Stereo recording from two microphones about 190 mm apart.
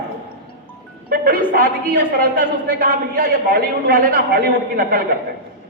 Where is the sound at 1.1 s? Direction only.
50° right (ahead or behind).